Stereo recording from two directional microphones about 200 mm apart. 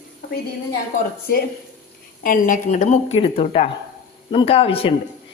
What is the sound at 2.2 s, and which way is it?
Speech, 45° left (ahead or behind).